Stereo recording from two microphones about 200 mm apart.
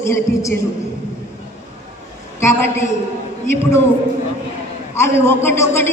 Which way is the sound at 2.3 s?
15° left (ahead or behind).